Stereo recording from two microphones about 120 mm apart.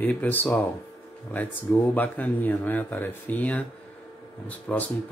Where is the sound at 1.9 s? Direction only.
15° left (ahead or behind).